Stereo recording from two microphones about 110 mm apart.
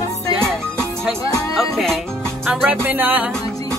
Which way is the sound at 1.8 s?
Centre (ahead or behind).